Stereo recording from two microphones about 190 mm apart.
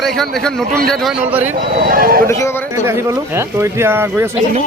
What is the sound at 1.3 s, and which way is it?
Speech, 10° right (ahead or behind).